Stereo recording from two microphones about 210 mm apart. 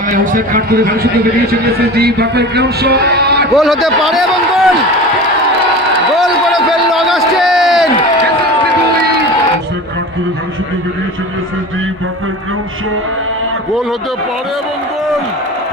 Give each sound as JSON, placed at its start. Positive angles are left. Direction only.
{"t": 0.1, "sound": "speech", "side_deg": -45}
{"t": 2.0, "sound": "speech", "side_deg": -50}
{"t": 3.5, "sound": "a man's voice", "side_deg": 0}
{"t": 6.1, "sound": "a sound", "side_deg": 0}